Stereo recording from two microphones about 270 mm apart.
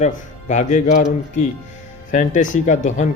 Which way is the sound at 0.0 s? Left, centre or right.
Left.